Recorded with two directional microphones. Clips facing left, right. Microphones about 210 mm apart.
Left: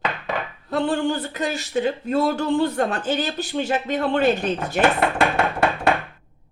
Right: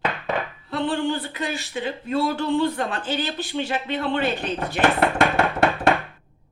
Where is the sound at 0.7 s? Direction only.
45° left (ahead or behind).